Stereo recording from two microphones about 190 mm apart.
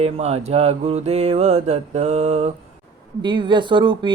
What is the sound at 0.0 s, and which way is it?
Mantra, 30° right (ahead or behind).